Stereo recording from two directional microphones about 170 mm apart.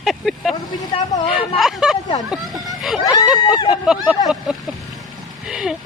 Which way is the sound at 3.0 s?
20° left (ahead or behind).